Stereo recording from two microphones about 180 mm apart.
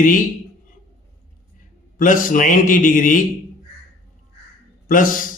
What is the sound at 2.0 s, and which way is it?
A man's voice, 50° left (ahead or behind).